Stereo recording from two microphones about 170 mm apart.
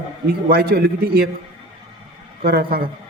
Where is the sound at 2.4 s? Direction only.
65° right (ahead or behind).